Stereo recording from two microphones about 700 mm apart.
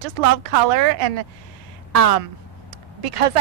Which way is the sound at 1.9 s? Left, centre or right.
Right.